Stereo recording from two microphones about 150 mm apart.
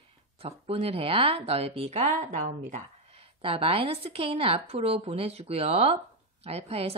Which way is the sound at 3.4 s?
40° right (ahead or behind).